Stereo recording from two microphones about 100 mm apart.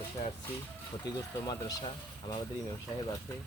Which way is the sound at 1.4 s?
45° left (ahead or behind).